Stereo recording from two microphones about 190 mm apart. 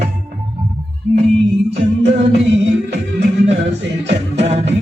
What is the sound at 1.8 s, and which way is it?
A capella, 35° right (ahead or behind).